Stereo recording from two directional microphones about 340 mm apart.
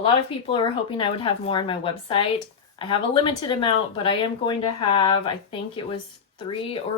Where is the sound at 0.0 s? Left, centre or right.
Centre.